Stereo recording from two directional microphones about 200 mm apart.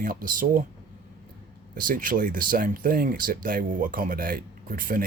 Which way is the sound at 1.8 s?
45° right (ahead or behind).